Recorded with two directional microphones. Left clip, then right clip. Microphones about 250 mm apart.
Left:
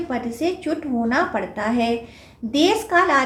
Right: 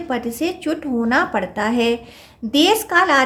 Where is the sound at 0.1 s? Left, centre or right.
Right.